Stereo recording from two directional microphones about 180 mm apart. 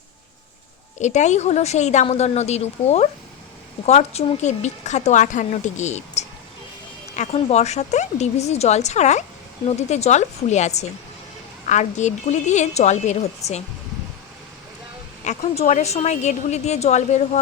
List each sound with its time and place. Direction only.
0.9 s speech: 40° left (ahead or behind)
15.2 s speech: 40° left (ahead or behind)